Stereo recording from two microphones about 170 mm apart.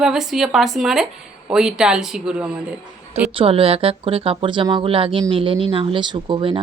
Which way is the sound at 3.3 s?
30° right (ahead or behind).